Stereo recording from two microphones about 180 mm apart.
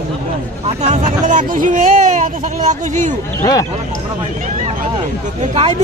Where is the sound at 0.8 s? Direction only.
40° right (ahead or behind).